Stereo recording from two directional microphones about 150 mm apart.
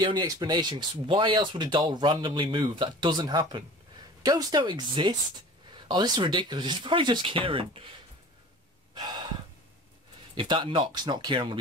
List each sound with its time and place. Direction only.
0.0 s speech: 30° right (ahead or behind)
8.9 s gasp: 30° right (ahead or behind)
10.3 s speech: 35° right (ahead or behind)